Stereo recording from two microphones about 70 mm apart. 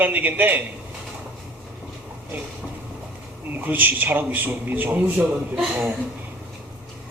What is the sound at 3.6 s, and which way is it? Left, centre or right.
Speech, right.